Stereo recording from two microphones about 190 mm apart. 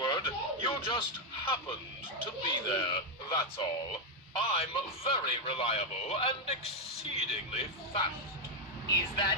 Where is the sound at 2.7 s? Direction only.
20° left (ahead or behind).